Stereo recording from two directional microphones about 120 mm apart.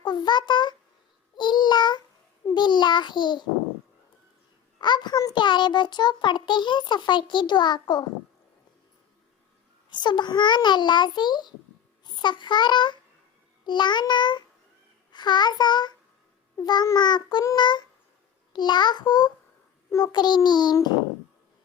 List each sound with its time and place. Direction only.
0.0 s a child's voice: 35° left (ahead or behind)
4.8 s a child's voice: 40° left (ahead or behind)
9.9 s a child's voice: 40° left (ahead or behind)